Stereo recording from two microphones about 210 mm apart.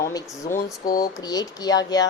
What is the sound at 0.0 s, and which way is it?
Speech, 15° left (ahead or behind).